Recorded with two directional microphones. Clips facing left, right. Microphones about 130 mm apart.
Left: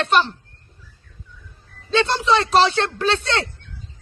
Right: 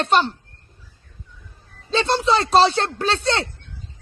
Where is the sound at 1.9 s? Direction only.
30° right (ahead or behind).